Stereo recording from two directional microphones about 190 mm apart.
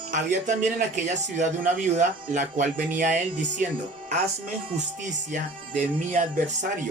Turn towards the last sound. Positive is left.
turn(degrees=-45)  # may be behind; listen again after turning